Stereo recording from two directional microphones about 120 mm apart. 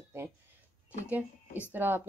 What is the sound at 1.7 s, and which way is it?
Speech, 15° right (ahead or behind).